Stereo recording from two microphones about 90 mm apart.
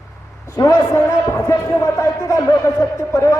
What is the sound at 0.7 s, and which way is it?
A man's voice, 45° left (ahead or behind).